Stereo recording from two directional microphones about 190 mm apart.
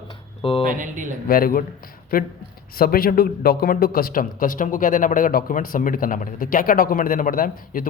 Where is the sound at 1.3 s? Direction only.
50° left (ahead or behind).